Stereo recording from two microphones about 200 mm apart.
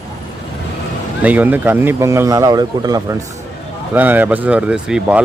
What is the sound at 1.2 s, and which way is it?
A man's voice, 10° right (ahead or behind).